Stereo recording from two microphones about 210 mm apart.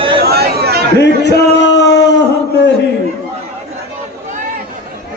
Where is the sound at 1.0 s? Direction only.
55° left (ahead or behind).